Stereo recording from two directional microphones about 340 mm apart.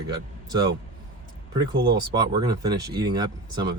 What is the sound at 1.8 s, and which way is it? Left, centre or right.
Speech, right.